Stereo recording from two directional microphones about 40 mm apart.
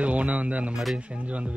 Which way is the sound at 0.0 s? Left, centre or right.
Right.